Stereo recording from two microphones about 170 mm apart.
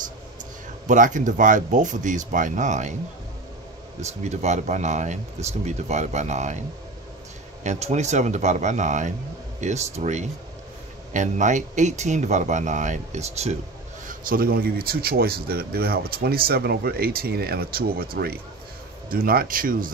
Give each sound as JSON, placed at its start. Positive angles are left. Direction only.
{"t": 0.8, "sound": "speech", "side_deg": -50}
{"t": 4.0, "sound": "speech", "side_deg": -40}
{"t": 7.6, "sound": "speech", "side_deg": -45}
{"t": 14.0, "sound": "speech", "side_deg": -60}